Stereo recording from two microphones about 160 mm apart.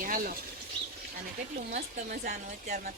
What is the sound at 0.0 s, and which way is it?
Bird, 60° right (ahead or behind).